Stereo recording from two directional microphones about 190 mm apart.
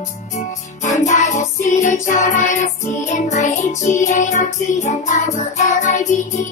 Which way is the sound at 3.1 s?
40° left (ahead or behind).